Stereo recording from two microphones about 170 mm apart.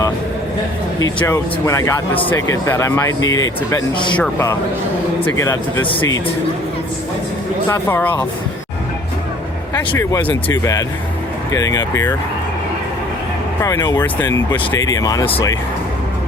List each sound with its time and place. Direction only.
1.2 s speech: 15° left (ahead or behind)
4.2 s speech: 15° left (ahead or behind)
5.8 s a man's voice: 30° left (ahead or behind)
7.7 s speech: 15° left (ahead or behind)
9.9 s speech: 20° left (ahead or behind)
13.6 s speech: 20° left (ahead or behind)